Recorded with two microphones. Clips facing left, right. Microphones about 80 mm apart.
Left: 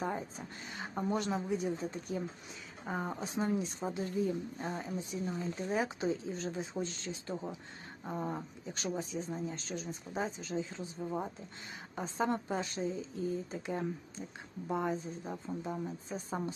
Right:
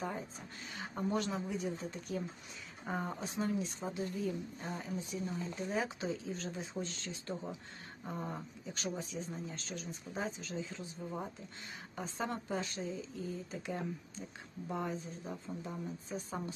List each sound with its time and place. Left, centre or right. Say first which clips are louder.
0.8 s a woman's voice: left 1 dB; left
2.8 s speech: left 1 dB; centre
3.2 s a woman's voice: left 2 dB; left
9.0 s a woman's voice: left 4 dB; left
14.8 s a woman's voice: left 4 dB; centre